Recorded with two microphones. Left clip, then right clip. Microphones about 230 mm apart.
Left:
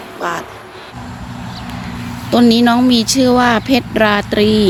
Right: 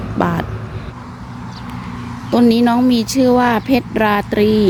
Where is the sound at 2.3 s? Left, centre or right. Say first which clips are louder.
Left 2 dB; centre.